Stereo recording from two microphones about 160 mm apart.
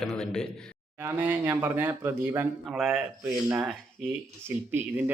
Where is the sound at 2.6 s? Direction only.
Centre (ahead or behind).